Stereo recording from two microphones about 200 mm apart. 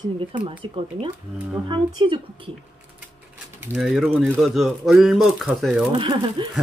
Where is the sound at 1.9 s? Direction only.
25° right (ahead or behind).